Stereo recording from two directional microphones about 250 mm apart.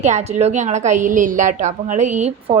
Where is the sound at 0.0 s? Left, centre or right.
Right.